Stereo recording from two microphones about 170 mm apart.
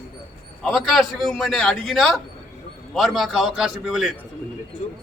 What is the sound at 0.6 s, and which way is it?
A man's voice, centre (ahead or behind).